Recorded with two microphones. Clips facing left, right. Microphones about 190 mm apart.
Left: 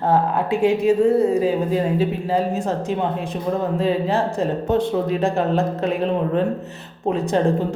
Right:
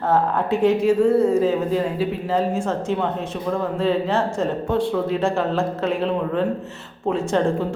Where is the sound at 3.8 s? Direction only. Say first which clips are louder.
Right 1 dB; 15° left (ahead or behind).